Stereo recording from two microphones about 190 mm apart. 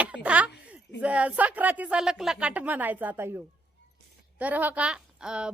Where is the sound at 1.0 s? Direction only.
5° right (ahead or behind).